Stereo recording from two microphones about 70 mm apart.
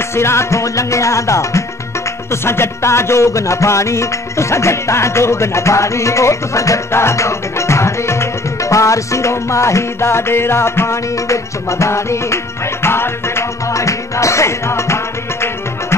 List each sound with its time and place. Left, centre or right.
0.1 s music: left